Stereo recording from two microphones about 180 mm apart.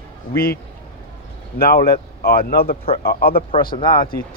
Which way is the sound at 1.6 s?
55° left (ahead or behind).